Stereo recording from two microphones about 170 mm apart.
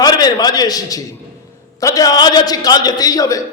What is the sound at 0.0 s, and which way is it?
A man's voice, 25° left (ahead or behind).